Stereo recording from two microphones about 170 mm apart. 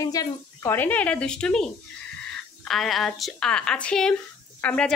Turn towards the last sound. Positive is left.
turn(degrees=5)  # may be behind; listen again after turning